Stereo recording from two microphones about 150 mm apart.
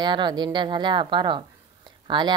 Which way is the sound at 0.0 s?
30° right (ahead or behind).